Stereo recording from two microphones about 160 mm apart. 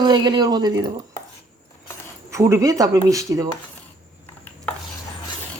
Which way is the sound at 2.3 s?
20° right (ahead or behind).